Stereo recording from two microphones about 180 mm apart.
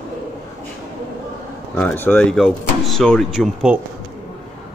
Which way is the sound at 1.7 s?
10° left (ahead or behind).